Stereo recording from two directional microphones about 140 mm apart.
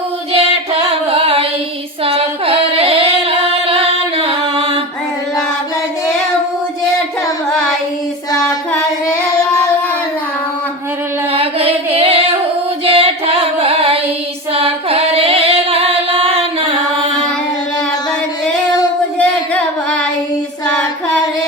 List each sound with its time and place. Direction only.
0.3 s music: 45° right (ahead or behind)
11.3 s music: 45° right (ahead or behind)
12.9 s singing: 45° right (ahead or behind)
19.2 s carnatic music: 10° left (ahead or behind)